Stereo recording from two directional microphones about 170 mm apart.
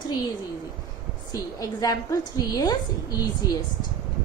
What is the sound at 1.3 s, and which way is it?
A woman's voice, 20° left (ahead or behind).